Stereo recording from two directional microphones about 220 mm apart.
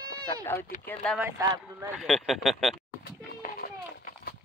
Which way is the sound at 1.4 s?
15° right (ahead or behind).